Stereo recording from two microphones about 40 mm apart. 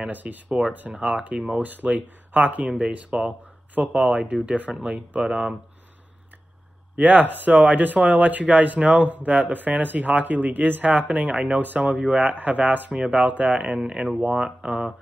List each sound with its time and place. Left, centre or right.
0.1 s speech: right
0.5 s speech: centre
0.7 s speech: right
1.6 s speech: right
5.2 s speech: right
7.0 s speech: right
12.0 s speech: right
12.9 s speech: right
13.7 s speech: right